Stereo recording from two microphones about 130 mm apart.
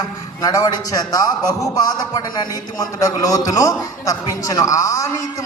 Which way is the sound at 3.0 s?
25° left (ahead or behind).